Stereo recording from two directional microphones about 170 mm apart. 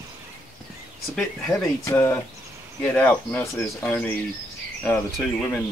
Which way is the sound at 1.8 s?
15° left (ahead or behind).